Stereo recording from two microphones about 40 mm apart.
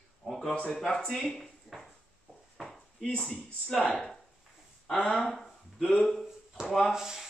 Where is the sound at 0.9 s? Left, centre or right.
Left.